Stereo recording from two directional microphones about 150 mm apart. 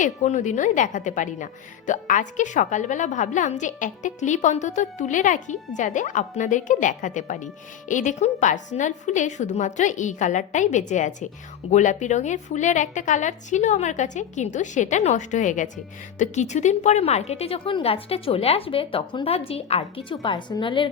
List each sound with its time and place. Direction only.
0.0 s a woman's voice: 55° left (ahead or behind); by 20.9 s 35° left (ahead or behind)